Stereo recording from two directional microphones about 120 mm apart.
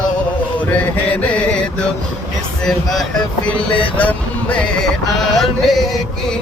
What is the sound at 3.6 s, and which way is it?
Vehicle, 45° left (ahead or behind).